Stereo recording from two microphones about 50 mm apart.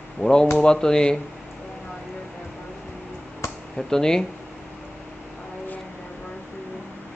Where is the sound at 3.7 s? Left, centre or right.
Centre.